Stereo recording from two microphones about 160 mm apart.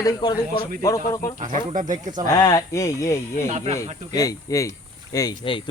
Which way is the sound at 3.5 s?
45° right (ahead or behind).